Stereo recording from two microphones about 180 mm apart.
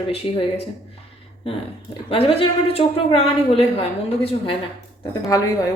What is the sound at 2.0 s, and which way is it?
A woman's voice, 30° left (ahead or behind).